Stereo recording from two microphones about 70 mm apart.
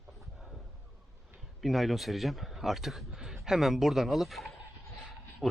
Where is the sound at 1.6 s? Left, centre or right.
Centre.